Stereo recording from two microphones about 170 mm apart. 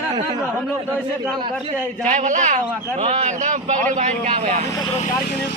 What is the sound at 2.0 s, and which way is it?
Speech, 45° right (ahead or behind).